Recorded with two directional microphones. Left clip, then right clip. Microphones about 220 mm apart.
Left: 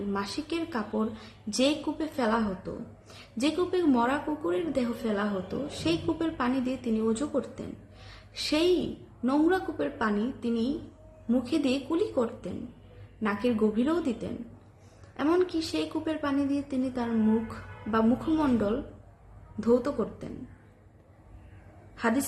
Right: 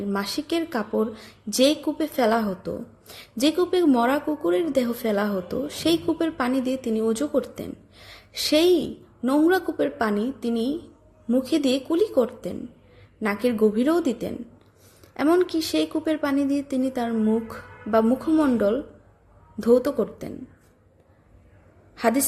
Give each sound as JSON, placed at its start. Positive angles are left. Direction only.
{"t": 0.1, "sound": "a woman's voice", "side_deg": -35}
{"t": 8.0, "sound": "a sound", "side_deg": -35}
{"t": 9.2, "sound": "a woman's voice", "side_deg": -30}